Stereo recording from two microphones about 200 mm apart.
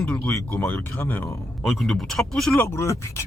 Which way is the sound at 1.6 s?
Centre (ahead or behind).